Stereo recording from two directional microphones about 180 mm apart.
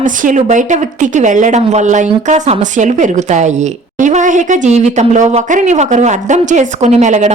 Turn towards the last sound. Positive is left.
turn(degrees=-40)  # may be behind; listen again after turning